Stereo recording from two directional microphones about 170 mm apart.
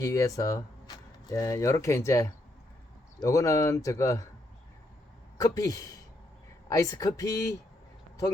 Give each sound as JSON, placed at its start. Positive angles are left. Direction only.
{"t": 0.0, "sound": "speech", "side_deg": 20}
{"t": 5.4, "sound": "speech", "side_deg": 20}